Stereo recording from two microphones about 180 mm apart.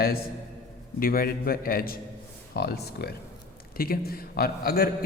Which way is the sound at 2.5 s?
65° left (ahead or behind).